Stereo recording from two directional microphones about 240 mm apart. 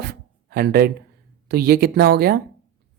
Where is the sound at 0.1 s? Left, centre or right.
Right.